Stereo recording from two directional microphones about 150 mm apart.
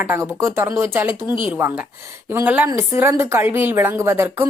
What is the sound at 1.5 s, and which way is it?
Speech, 15° right (ahead or behind).